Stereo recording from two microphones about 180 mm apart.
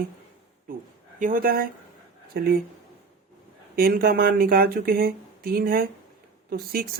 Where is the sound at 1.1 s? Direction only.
50° right (ahead or behind).